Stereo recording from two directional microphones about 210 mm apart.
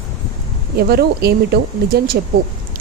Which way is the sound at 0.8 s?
50° right (ahead or behind).